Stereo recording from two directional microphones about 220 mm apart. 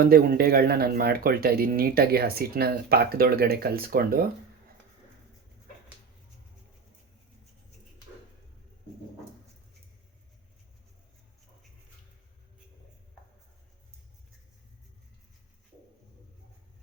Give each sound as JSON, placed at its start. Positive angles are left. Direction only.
{"t": 0.0, "sound": "speech", "side_deg": -40}